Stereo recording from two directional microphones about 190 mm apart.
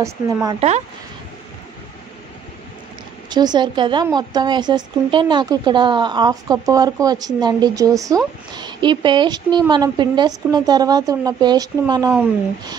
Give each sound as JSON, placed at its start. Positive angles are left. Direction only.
{"t": 0.0, "sound": "speech", "side_deg": -20}
{"t": 0.6, "sound": "speech", "side_deg": -35}
{"t": 3.3, "sound": "speech", "side_deg": -20}